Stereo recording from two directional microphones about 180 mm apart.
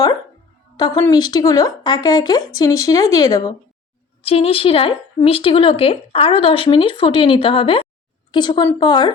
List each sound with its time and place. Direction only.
0.8 s speech: 20° left (ahead or behind)
4.2 s a woman's voice: 35° left (ahead or behind)